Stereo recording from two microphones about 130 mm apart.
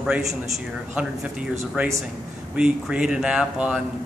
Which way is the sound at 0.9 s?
10° right (ahead or behind).